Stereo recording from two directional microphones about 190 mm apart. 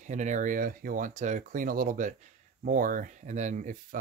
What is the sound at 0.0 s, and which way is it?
Speech, 40° right (ahead or behind).